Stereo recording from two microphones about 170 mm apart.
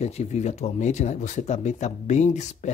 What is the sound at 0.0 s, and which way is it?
Speech, 40° left (ahead or behind).